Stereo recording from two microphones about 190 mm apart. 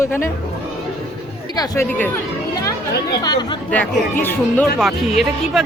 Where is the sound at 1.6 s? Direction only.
15° left (ahead or behind).